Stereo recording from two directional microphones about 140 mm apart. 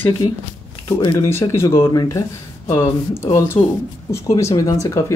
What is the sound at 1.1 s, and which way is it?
Speech, 20° left (ahead or behind).